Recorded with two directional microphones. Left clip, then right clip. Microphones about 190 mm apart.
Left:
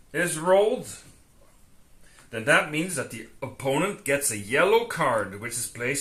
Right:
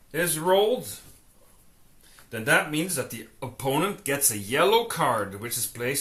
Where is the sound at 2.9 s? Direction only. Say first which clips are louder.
Even; 40° right (ahead or behind).